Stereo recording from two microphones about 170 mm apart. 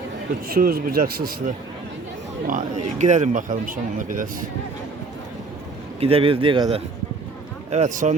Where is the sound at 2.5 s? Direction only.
50° right (ahead or behind).